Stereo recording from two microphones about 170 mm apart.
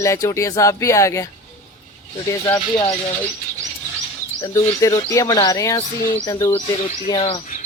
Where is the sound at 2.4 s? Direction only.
20° left (ahead or behind).